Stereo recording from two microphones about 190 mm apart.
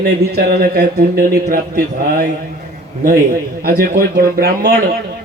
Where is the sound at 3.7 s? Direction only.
55° right (ahead or behind).